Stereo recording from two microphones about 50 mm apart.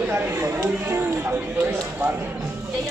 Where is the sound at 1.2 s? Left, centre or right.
Right.